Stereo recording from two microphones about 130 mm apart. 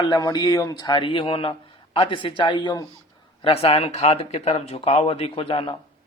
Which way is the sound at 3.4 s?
45° left (ahead or behind).